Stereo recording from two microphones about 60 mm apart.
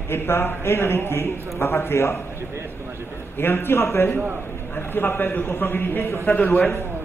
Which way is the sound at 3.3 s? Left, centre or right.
Left.